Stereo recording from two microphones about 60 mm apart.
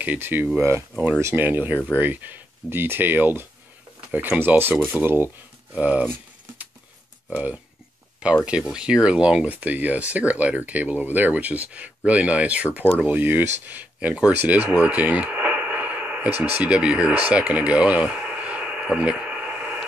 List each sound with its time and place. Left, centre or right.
0.0 s speech: right
0.6 s speech: right
1.3 s speech: right
5.8 s speech: right
7.2 s speech: centre
13.9 s speech: centre